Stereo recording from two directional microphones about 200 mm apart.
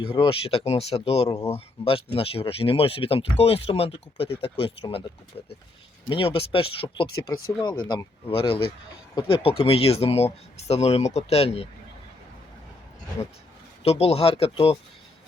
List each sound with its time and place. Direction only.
0.2 s speech: 30° left (ahead or behind)
6.1 s speech: 25° left (ahead or behind)
13.8 s speech: 30° left (ahead or behind)